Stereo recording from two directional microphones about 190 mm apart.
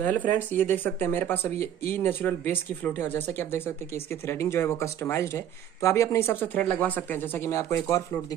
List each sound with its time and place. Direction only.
0.0 s speech: 10° left (ahead or behind)